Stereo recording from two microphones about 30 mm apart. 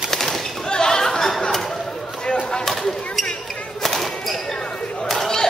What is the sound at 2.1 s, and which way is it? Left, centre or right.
Chop, left.